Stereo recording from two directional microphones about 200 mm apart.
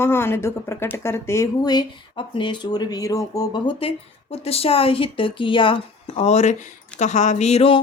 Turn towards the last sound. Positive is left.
turn(degrees=30)  # may be behind; listen again after turning